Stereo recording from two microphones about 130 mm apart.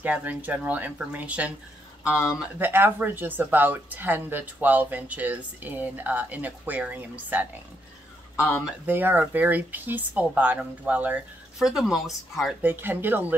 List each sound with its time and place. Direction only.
0.0 s speech: 10° right (ahead or behind)
2.0 s speech: 20° left (ahead or behind)
2.6 s speech: 15° right (ahead or behind)
8.4 s speech: 15° left (ahead or behind)
8.8 s speech: 15° right (ahead or behind)
12.6 s speech: 15° right (ahead or behind)